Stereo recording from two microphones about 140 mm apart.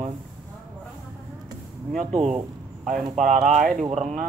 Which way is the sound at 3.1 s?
60° right (ahead or behind).